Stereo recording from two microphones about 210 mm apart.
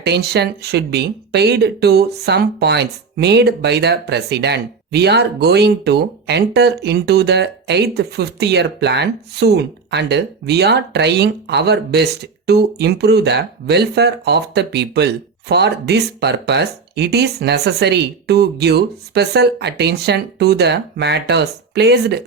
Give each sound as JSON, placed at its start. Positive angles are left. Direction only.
{"t": 0.0, "sound": "speech", "side_deg": -50}